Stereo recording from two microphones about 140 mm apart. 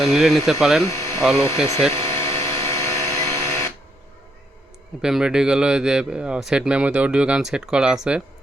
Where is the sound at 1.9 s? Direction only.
45° right (ahead or behind).